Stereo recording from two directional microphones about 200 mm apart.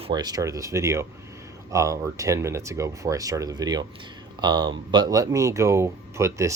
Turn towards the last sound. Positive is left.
turn(degrees=-15)  # may be behind; listen again after turning